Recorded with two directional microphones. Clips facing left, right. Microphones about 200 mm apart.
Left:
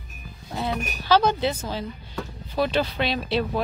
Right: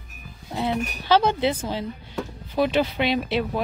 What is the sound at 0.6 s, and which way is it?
Speech, 20° right (ahead or behind).